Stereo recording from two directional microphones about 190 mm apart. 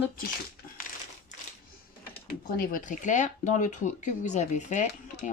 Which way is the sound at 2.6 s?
45° left (ahead or behind).